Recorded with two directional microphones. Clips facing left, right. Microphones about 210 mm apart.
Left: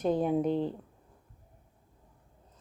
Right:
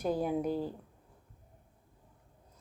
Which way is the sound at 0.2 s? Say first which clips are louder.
Left 4 dB; 5° right (ahead or behind).